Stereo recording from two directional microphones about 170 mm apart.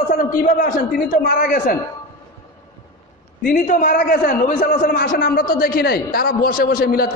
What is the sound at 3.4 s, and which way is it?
A man's voice, 50° left (ahead or behind).